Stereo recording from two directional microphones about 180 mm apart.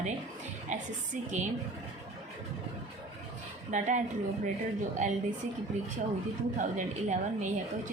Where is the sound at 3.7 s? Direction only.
45° right (ahead or behind).